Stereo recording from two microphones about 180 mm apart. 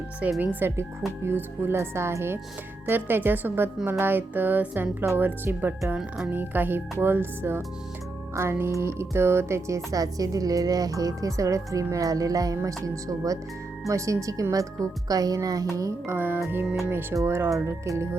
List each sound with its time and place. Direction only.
0.2 s speech: 10° right (ahead or behind)